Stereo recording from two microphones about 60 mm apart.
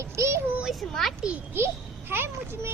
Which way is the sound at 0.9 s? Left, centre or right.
Centre.